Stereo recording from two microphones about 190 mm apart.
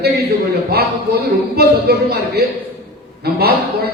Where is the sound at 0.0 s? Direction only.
55° right (ahead or behind).